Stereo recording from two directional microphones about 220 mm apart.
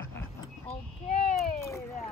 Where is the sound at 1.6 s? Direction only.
10° left (ahead or behind).